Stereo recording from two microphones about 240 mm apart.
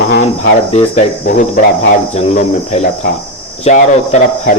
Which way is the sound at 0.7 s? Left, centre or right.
Left.